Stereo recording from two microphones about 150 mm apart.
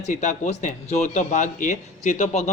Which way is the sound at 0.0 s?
55° left (ahead or behind).